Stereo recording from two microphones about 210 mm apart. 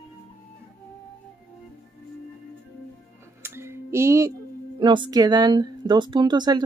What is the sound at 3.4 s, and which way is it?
Music, 10° right (ahead or behind).